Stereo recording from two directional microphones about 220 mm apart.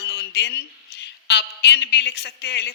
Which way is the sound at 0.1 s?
50° left (ahead or behind).